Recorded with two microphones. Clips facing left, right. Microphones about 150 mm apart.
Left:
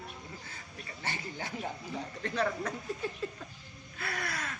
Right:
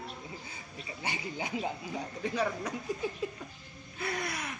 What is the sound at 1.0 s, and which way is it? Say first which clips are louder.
Speech: right 2 dB; 15° right (ahead or behind).